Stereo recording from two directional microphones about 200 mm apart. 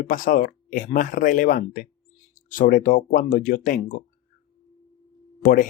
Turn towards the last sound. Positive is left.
turn(degrees=45)  # may be behind; listen again after turning